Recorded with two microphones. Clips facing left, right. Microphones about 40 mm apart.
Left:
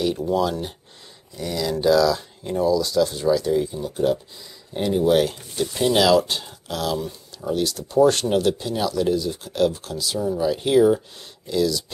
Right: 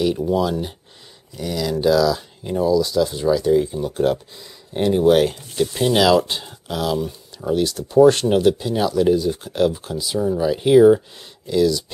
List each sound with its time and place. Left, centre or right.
0.0 s speech: centre
3.8 s speech: right
4.7 s speech: right
5.3 s speech: centre